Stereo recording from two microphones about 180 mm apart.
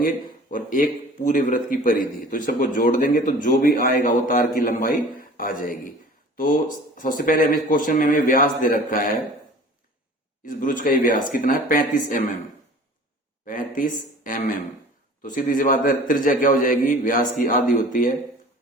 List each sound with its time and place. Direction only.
0.0 s speech: 50° left (ahead or behind)
10.4 s speech: 45° left (ahead or behind)
13.4 s speech: 50° left (ahead or behind)